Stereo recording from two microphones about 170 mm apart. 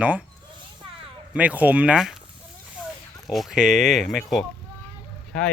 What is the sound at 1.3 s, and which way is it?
Speech, 10° right (ahead or behind).